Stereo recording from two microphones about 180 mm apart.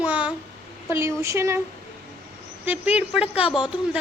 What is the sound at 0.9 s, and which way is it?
Speech, 15° right (ahead or behind).